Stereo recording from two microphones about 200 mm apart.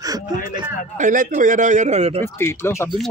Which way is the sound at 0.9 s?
40° right (ahead or behind).